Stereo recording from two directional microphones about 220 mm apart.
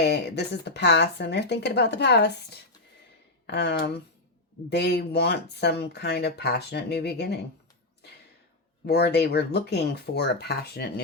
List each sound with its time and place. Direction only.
0.0 s speech: 50° left (ahead or behind)
8.9 s speech: 50° left (ahead or behind)